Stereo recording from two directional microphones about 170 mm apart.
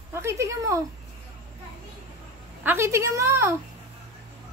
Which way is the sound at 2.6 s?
15° right (ahead or behind).